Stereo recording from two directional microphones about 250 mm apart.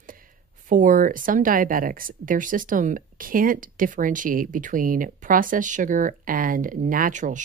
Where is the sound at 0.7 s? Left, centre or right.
Right.